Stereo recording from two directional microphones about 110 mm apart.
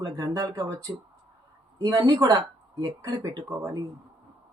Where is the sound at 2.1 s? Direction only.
30° right (ahead or behind).